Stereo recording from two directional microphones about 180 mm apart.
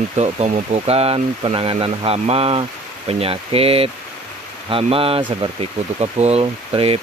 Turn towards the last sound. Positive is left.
turn(degrees=-30)  # may be behind; listen again after turning